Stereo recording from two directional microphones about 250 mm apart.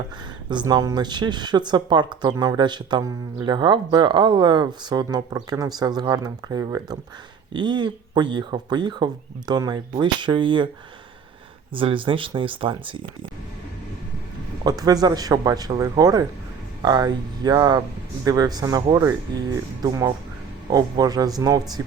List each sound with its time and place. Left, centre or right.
0.5 s speech: centre
11.7 s speech: right
14.6 s speech: centre